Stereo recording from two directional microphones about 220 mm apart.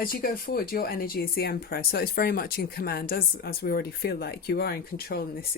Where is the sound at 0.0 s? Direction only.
40° left (ahead or behind).